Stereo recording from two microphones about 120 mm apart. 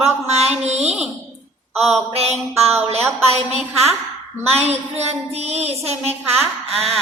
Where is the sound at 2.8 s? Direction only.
60° right (ahead or behind).